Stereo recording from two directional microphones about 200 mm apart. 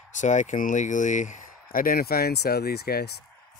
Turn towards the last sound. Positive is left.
turn(degrees=50)  # may be behind; listen again after turning